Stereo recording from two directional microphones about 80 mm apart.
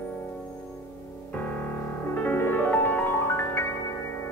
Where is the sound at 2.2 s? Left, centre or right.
Left.